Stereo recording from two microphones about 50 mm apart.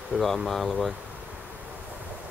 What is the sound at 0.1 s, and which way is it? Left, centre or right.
Speech, right.